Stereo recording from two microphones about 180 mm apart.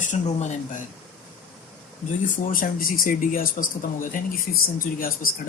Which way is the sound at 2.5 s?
50° left (ahead or behind).